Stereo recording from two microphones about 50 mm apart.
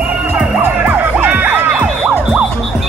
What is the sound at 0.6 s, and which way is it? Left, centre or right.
Music, right.